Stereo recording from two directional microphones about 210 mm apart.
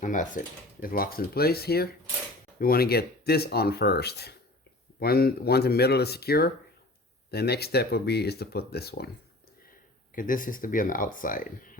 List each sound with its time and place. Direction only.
0.0 s speech: 35° left (ahead or behind)
10.2 s speech: 40° left (ahead or behind)